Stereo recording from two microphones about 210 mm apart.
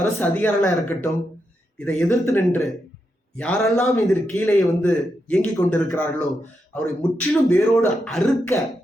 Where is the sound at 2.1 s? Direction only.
15° left (ahead or behind).